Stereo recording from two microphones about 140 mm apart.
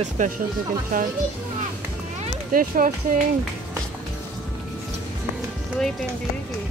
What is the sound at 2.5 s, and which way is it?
Speech, 75° right (ahead or behind).